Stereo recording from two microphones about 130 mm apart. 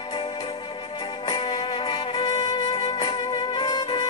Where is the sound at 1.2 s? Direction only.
35° left (ahead or behind).